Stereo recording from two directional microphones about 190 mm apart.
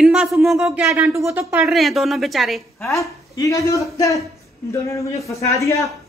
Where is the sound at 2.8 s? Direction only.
15° left (ahead or behind).